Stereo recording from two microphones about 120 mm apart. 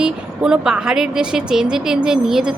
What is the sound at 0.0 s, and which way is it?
A woman's voice, 5° right (ahead or behind).